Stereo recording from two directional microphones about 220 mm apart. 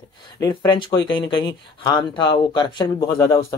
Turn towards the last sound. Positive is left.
turn(degrees=15)  # may be behind; listen again after turning